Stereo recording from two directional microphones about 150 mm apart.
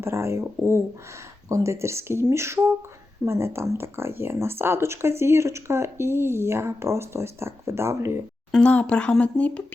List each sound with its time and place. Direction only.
0.0 s speech: 15° right (ahead or behind)
8.5 s speech: 10° left (ahead or behind)